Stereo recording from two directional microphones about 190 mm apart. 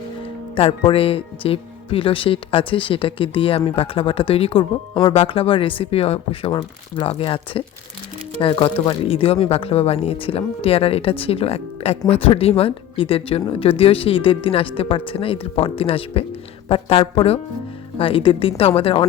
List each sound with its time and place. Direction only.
0.5 s speech: 30° left (ahead or behind)